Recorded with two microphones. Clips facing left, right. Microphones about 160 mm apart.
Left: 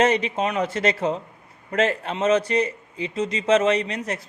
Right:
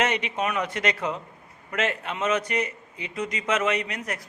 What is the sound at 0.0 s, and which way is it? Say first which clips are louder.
A man's voice: left 5 dB; 35° left (ahead or behind).